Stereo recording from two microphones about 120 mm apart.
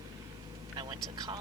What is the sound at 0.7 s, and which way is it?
Speech, 40° right (ahead or behind).